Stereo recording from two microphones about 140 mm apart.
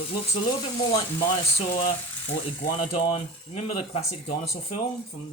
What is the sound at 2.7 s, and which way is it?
Speech, 45° left (ahead or behind).